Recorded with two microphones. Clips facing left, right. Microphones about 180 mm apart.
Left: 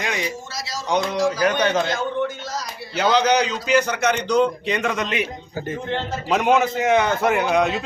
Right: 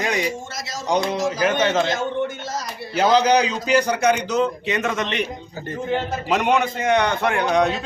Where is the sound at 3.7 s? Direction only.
35° right (ahead or behind).